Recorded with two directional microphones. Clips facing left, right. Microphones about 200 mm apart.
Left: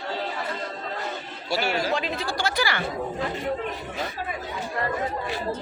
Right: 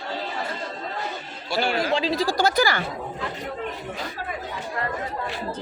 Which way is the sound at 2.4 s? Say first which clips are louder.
Right 4 dB; 40° right (ahead or behind).